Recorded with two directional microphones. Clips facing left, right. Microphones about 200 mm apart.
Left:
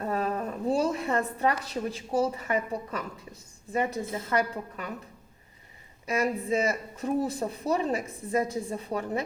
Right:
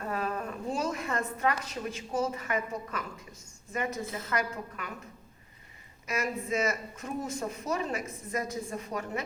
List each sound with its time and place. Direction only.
0.0 s a woman's voice: 35° left (ahead or behind)
6.1 s speech: 35° left (ahead or behind)